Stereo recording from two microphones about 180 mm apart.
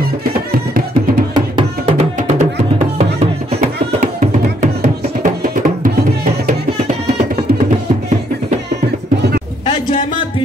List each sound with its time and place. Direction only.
0.5 s music: 55° right (ahead or behind)
1.3 s music: 30° right (ahead or behind)